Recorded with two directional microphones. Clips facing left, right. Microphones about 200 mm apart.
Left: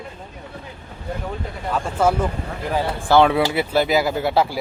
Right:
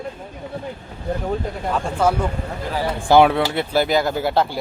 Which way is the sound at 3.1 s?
10° right (ahead or behind).